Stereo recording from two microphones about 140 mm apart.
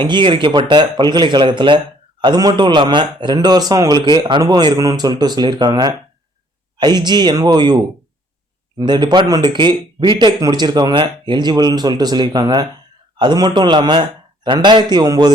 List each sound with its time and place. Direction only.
0.0 s a man's voice: 35° right (ahead or behind)
8.8 s speech: 30° right (ahead or behind)